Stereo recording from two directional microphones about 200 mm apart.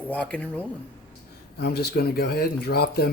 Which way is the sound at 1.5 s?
55° left (ahead or behind).